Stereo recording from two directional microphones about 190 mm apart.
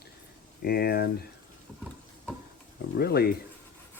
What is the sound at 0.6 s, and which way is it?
Speech, 55° left (ahead or behind).